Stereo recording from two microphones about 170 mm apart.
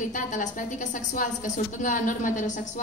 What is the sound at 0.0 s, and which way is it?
A woman's voice, 50° left (ahead or behind).